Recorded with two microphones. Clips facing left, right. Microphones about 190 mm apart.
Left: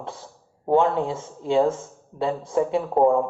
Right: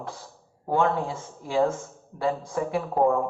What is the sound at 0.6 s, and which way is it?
Speech, 25° left (ahead or behind).